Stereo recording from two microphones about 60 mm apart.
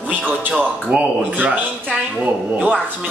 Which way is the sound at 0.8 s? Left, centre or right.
Right.